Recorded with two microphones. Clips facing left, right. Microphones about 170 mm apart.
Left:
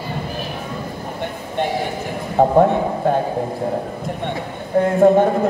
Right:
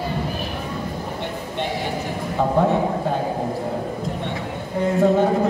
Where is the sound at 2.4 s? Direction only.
55° left (ahead or behind).